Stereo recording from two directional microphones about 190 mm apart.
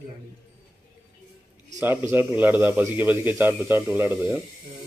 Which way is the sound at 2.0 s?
10° right (ahead or behind).